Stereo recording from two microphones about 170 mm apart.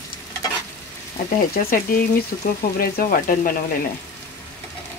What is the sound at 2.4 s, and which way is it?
Speech, 55° left (ahead or behind).